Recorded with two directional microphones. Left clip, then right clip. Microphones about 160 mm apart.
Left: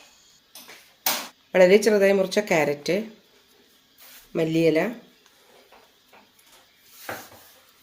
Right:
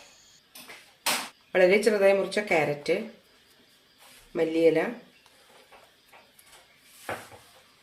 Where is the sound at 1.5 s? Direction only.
50° left (ahead or behind).